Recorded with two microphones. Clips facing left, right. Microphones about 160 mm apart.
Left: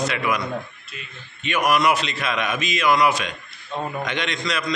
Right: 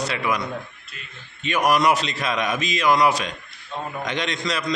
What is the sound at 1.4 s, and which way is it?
A man's voice, 35° right (ahead or behind).